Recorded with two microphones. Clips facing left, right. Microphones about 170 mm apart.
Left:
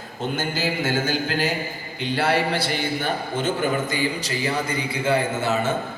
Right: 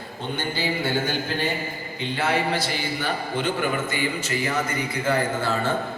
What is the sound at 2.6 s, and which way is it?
A man's voice, 55° left (ahead or behind).